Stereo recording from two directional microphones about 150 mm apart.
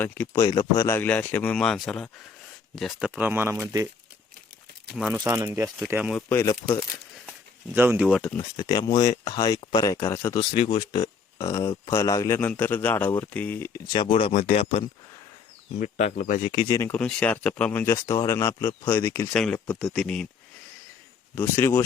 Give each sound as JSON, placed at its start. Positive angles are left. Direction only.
{"t": 0.0, "sound": "a man's voice", "side_deg": 10}
{"t": 0.4, "sound": "a man's voice", "side_deg": 25}
{"t": 3.2, "sound": "speech", "side_deg": -15}
{"t": 5.1, "sound": "speech", "side_deg": -25}
{"t": 6.1, "sound": "speech", "side_deg": 15}
{"t": 7.7, "sound": "speech", "side_deg": -15}
{"t": 8.0, "sound": "speech", "side_deg": 5}
{"t": 8.5, "sound": "speech", "side_deg": 30}
{"t": 10.5, "sound": "a man's voice", "side_deg": 35}
{"t": 14.0, "sound": "speech", "side_deg": 40}
{"t": 15.8, "sound": "speech", "side_deg": 55}
{"t": 16.9, "sound": "a man's voice", "side_deg": 5}
{"t": 18.0, "sound": "a man's voice", "side_deg": 20}
{"t": 21.3, "sound": "a man's voice", "side_deg": 15}